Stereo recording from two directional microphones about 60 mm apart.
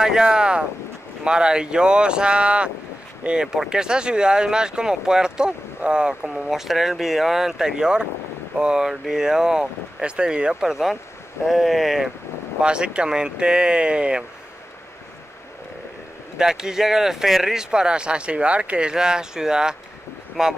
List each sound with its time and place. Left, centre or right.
0.0 s speech: centre
12.6 s speech: centre
16.3 s speech: centre